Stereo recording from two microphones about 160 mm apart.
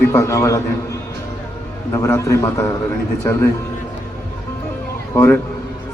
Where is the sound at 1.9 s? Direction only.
20° left (ahead or behind).